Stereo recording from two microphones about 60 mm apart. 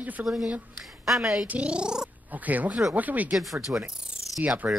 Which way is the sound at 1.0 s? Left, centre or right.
Centre.